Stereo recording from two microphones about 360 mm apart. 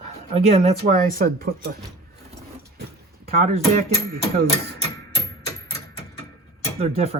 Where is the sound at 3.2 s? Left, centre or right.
Centre.